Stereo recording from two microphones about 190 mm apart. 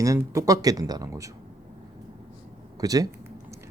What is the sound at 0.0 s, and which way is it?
Speech, 15° right (ahead or behind).